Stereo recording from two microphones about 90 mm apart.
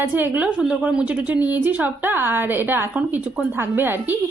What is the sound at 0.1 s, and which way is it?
A woman's voice, 20° right (ahead or behind).